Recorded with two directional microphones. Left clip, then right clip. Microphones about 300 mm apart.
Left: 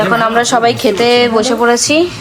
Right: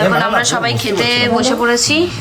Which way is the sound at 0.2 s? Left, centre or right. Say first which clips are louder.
Left 4 dB; centre.